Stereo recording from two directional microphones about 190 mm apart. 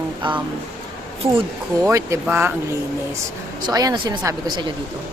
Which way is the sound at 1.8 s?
15° right (ahead or behind).